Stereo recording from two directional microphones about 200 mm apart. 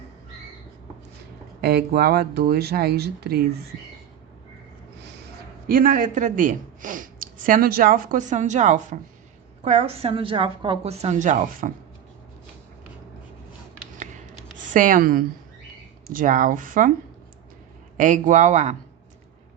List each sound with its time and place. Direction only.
1.6 s speech: 50° right (ahead or behind)
5.6 s a woman's voice: 45° right (ahead or behind)
14.7 s a woman's voice: 40° right (ahead or behind)
17.9 s a woman's voice: 40° right (ahead or behind)